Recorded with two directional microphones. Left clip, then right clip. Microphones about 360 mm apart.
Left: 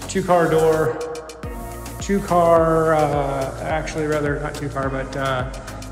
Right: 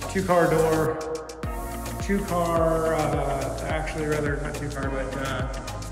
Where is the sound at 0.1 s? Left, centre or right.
Centre.